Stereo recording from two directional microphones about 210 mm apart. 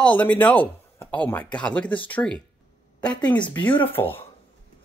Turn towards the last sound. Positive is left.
turn(degrees=10)  # may be behind; listen again after turning